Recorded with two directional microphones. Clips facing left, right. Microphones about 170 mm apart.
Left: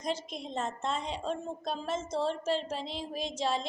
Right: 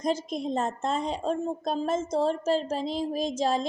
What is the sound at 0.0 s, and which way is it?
A woman's voice, 40° right (ahead or behind).